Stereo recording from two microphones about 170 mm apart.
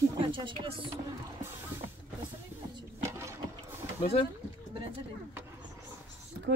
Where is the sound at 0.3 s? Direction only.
30° right (ahead or behind).